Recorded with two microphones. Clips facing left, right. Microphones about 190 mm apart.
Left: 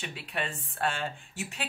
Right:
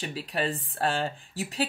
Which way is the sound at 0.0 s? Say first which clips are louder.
Right 6 dB; 35° right (ahead or behind).